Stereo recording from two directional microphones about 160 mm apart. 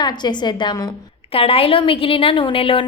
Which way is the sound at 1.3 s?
35° left (ahead or behind).